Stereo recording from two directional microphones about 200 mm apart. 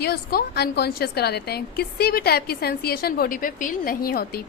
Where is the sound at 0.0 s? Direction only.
50° left (ahead or behind).